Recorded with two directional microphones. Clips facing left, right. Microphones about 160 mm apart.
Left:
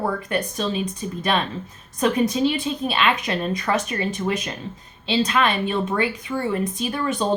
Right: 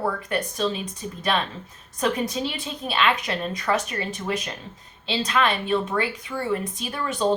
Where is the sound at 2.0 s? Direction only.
15° left (ahead or behind).